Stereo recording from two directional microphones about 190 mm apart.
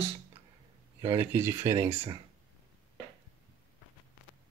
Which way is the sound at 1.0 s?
15° right (ahead or behind).